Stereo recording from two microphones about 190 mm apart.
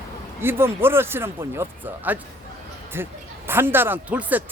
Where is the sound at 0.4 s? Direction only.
10° right (ahead or behind).